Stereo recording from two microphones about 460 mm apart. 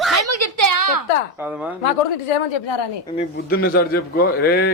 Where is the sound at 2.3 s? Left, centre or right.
Left.